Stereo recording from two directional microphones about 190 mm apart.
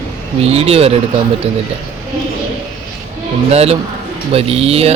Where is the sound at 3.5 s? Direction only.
35° right (ahead or behind).